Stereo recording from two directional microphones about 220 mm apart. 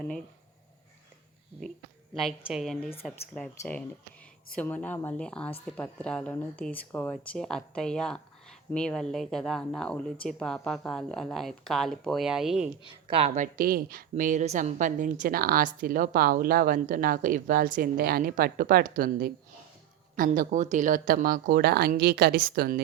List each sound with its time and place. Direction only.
2.1 s speech: centre (ahead or behind)
12.8 s speech: 25° right (ahead or behind); by 22.8 s 40° right (ahead or behind)